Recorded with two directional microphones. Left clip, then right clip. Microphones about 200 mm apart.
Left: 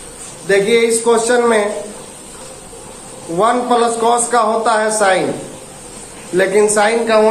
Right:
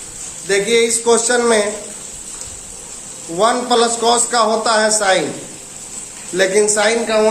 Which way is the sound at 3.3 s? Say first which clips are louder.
Left 1 dB; 20° right (ahead or behind).